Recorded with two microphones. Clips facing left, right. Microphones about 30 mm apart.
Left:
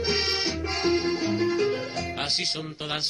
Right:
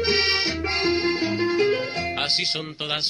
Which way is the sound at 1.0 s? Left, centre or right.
Right.